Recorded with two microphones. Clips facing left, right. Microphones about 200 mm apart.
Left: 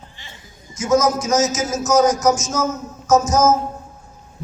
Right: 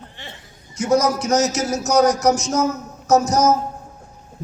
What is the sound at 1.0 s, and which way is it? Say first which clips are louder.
A man's voice: even; 65° right (ahead or behind).